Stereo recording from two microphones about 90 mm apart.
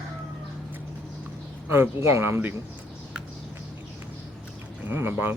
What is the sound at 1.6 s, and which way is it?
Speech, 25° right (ahead or behind).